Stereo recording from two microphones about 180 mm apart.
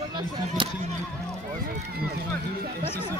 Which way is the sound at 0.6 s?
30° right (ahead or behind).